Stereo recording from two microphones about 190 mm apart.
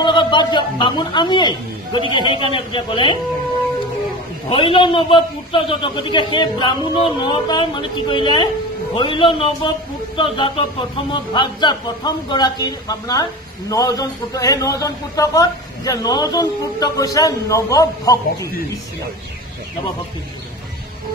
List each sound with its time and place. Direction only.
0.0 s speech: 25° left (ahead or behind)
4.5 s speech: 30° left (ahead or behind)